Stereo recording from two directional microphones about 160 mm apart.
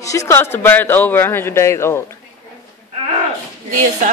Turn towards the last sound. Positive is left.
turn(degrees=-50)  # may be behind; listen again after turning